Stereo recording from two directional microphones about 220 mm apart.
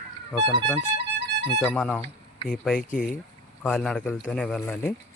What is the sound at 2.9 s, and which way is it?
Speech, 35° left (ahead or behind).